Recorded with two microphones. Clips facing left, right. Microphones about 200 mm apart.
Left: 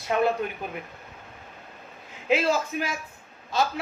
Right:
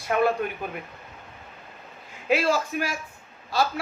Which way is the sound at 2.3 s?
20° left (ahead or behind).